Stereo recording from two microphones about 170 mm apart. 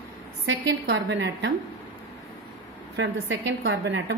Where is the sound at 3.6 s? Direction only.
90° right.